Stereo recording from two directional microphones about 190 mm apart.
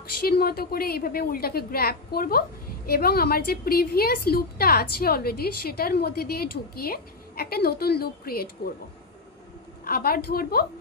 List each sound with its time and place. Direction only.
0.2 s a woman's voice: 55° left (ahead or behind)
9.8 s a woman's voice: 50° left (ahead or behind)